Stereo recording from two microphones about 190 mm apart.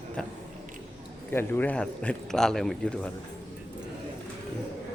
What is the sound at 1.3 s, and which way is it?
A man's voice, 10° left (ahead or behind).